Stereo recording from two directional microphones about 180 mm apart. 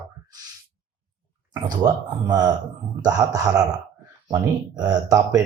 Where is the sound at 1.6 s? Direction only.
20° right (ahead or behind).